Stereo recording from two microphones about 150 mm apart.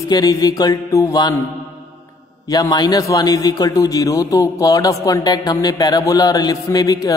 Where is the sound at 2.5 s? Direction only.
25° left (ahead or behind).